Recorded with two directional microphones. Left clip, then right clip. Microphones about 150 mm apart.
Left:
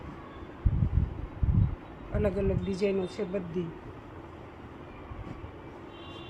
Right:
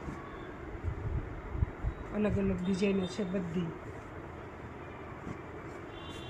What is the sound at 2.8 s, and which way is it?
Speech, 90° left.